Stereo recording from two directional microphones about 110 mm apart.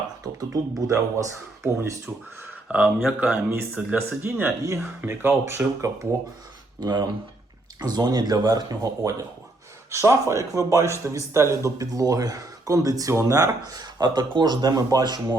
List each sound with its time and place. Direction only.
0.8 s speech: 30° right (ahead or behind)
2.6 s speech: 10° right (ahead or behind); by 6.1 s 25° right (ahead or behind)
6.7 s speech: 35° right (ahead or behind)
9.9 s speech: 25° right (ahead or behind)